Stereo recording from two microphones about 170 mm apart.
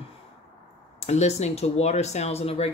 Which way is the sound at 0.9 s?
40° left (ahead or behind).